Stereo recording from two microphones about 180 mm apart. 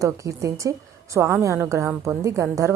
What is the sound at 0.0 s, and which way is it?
A woman's voice, 15° right (ahead or behind).